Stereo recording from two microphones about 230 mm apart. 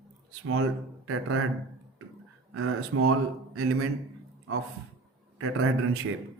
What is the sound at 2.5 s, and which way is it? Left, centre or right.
Speech, right.